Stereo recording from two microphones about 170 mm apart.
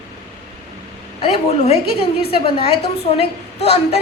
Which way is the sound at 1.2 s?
35° left (ahead or behind).